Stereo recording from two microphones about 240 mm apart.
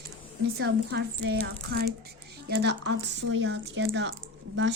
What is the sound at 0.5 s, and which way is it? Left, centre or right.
A woman's voice, right.